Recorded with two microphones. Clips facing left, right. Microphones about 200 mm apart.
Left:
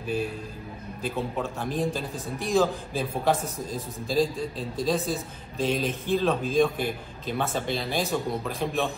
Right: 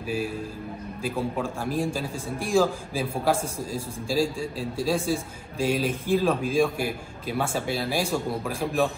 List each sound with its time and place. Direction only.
0.0 s a man's voice: 5° right (ahead or behind)
4.1 s a man's voice: 10° right (ahead or behind)